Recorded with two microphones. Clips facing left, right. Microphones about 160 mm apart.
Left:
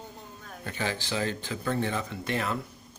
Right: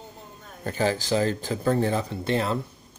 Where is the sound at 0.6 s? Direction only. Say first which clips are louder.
Right 8 dB; 40° right (ahead or behind).